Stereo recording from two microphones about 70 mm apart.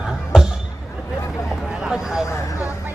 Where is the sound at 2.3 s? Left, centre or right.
Left.